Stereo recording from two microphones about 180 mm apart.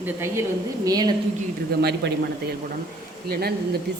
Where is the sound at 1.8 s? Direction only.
65° right (ahead or behind).